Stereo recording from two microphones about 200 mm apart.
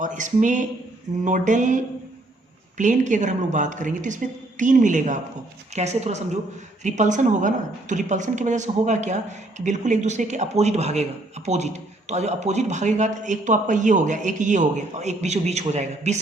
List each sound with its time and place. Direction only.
0.0 s a woman's voice: 40° right (ahead or behind)